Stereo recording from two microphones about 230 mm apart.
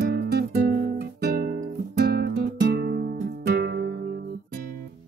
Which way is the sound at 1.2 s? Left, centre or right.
Right.